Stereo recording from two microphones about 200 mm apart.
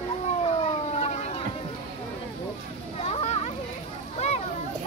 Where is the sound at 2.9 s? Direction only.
30° left (ahead or behind).